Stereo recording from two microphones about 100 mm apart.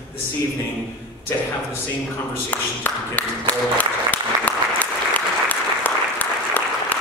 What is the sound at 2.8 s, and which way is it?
Applause, 15° left (ahead or behind).